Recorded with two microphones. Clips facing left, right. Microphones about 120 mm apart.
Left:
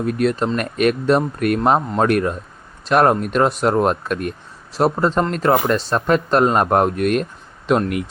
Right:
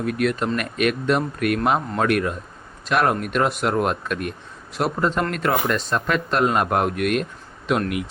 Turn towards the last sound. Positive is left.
turn(degrees=40)  # may be behind; listen again after turning